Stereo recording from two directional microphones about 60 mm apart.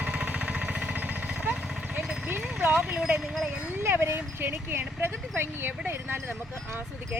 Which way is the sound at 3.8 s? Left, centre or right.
Right.